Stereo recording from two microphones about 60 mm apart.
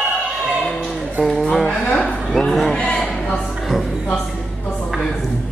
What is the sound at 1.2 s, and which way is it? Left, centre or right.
Speech, centre.